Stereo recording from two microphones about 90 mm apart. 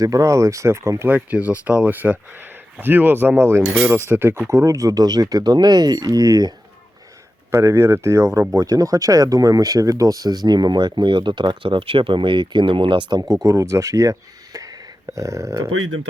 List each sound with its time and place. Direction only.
0.0 s speech: 40° right (ahead or behind)
7.5 s speech: 30° right (ahead or behind)